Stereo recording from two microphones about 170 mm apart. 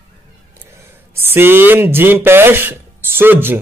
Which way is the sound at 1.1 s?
15° right (ahead or behind).